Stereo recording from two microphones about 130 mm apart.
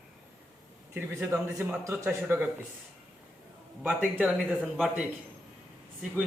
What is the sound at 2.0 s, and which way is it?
Speech, 10° right (ahead or behind).